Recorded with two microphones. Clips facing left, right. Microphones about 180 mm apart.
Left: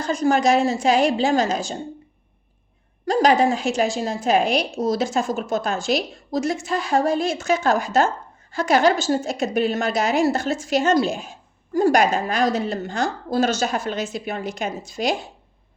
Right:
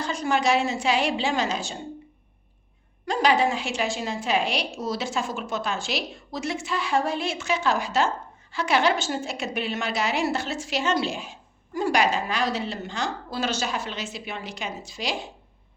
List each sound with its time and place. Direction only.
0.0 s a woman's voice: 45° left (ahead or behind)
3.1 s a woman's voice: 40° left (ahead or behind)